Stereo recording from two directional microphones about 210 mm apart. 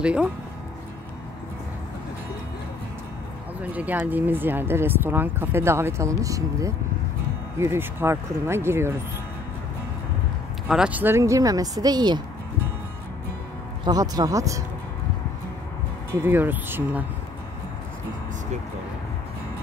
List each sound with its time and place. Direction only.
0.0 s speech: 5° right (ahead or behind)
3.7 s speech: 5° right (ahead or behind)
10.7 s speech: 5° right (ahead or behind)
13.8 s speech: 20° right (ahead or behind)
16.1 s speech: 10° right (ahead or behind)